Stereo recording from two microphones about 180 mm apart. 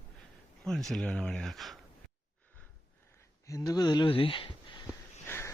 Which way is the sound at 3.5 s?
20° left (ahead or behind).